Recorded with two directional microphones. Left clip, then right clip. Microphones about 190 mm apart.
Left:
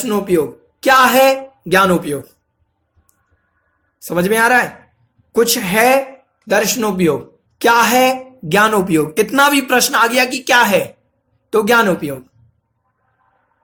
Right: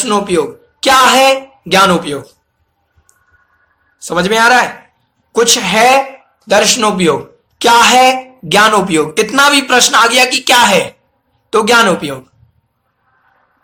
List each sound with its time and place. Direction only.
0.0 s a man's voice: 50° left (ahead or behind)
4.0 s a man's voice: 50° left (ahead or behind)